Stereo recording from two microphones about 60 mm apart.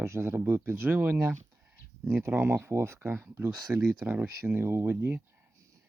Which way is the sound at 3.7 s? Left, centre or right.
Centre.